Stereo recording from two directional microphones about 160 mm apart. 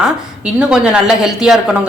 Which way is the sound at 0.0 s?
5° right (ahead or behind).